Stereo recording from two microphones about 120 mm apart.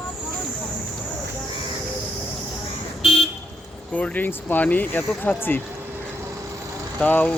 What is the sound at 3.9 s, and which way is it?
Speech, 10° left (ahead or behind).